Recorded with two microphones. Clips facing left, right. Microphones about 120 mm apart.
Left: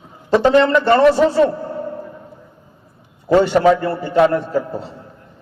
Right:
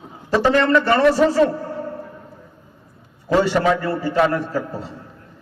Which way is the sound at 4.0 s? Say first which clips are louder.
Left 4 dB; 25° left (ahead or behind).